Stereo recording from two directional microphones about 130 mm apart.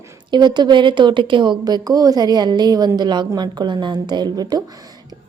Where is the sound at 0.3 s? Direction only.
35° right (ahead or behind).